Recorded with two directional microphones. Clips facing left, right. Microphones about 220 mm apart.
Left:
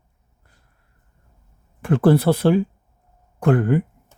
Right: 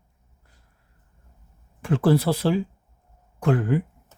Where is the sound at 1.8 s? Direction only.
55° left (ahead or behind).